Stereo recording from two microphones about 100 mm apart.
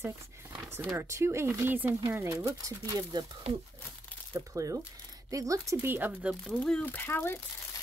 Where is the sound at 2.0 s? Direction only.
35° right (ahead or behind).